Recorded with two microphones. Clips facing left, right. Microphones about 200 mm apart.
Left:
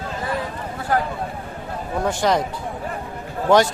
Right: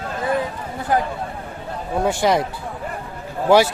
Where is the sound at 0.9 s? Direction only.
20° right (ahead or behind).